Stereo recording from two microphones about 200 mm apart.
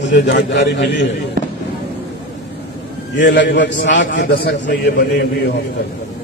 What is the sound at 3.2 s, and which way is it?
A man's voice, 60° left (ahead or behind).